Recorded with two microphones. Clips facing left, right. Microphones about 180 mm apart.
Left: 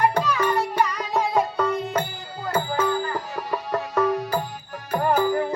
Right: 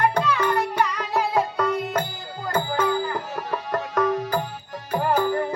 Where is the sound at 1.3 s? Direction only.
10° left (ahead or behind).